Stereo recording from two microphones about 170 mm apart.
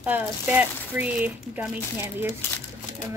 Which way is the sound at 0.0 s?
10° right (ahead or behind).